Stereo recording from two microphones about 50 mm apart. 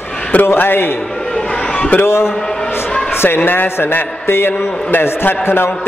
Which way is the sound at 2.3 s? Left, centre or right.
Centre.